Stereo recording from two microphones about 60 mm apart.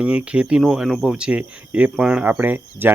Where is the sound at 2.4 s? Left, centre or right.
Right.